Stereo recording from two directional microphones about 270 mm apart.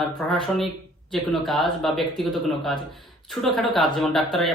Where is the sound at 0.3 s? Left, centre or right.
Centre.